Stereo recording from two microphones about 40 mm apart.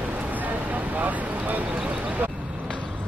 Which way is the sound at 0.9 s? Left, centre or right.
Right.